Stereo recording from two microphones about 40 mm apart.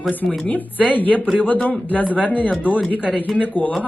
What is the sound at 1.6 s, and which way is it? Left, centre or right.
Speech, left.